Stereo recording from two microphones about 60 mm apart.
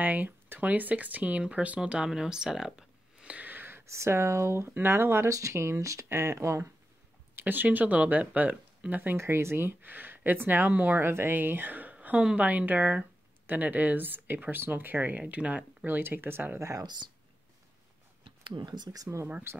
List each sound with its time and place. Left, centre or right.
0.0 s speech: right; by 3.3 s centre
3.3 s a sound: right
3.9 s speech: right
6.0 s speech: right
7.3 s speech: right
9.1 s speech: right
18.9 s speech: right